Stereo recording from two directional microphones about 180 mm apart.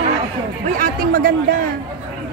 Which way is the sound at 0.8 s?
55° right (ahead or behind).